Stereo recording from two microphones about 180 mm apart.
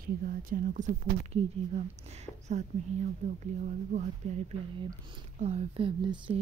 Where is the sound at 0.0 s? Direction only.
50° right (ahead or behind).